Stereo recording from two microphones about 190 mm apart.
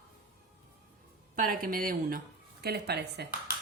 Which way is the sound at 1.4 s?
50° right (ahead or behind).